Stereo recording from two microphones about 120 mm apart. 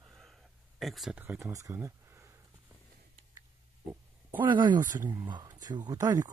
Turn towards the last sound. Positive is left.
turn(degrees=-30)  # may be behind; listen again after turning